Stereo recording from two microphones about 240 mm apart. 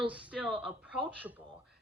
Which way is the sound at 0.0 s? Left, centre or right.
Centre.